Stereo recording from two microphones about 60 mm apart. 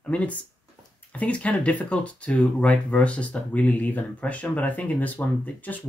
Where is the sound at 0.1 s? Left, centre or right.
Left.